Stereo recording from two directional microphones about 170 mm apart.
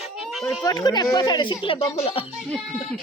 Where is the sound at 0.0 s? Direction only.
Centre (ahead or behind).